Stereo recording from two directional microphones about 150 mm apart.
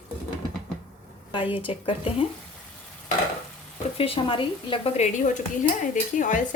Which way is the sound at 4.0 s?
35° left (ahead or behind).